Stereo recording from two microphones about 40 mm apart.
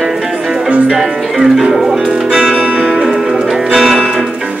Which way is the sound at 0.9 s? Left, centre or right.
Centre.